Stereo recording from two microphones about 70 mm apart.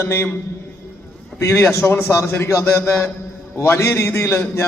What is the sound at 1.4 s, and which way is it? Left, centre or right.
A man's voice, left.